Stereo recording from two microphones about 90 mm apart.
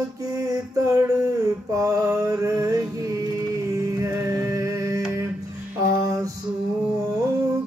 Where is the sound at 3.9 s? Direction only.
35° right (ahead or behind).